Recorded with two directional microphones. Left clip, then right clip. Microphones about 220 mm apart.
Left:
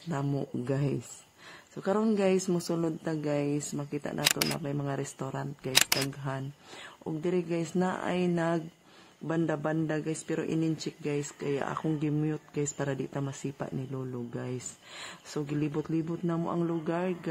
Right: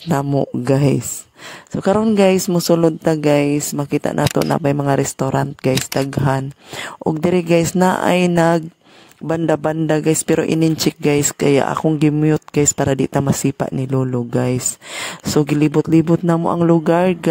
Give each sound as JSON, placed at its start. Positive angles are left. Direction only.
{"t": 0.1, "sound": "speech", "side_deg": -35}
{"t": 0.7, "sound": "speech", "side_deg": -50}
{"t": 4.2, "sound": "speech", "side_deg": 0}
{"t": 4.6, "sound": "speech", "side_deg": -45}
{"t": 5.7, "sound": "speech", "side_deg": 0}
{"t": 6.2, "sound": "speech", "side_deg": -45}